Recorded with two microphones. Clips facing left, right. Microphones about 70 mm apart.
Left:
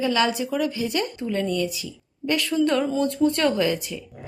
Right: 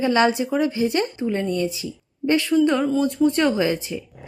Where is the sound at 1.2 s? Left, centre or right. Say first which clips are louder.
Right 2 dB; centre.